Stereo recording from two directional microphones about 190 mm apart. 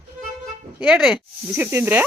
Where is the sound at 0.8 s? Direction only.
5° right (ahead or behind).